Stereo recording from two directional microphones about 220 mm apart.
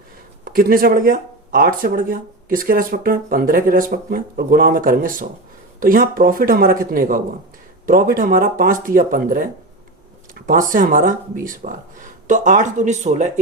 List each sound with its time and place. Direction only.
0.4 s speech: 40° right (ahead or behind)